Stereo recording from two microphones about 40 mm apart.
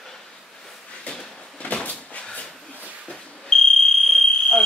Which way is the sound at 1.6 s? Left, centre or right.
Left.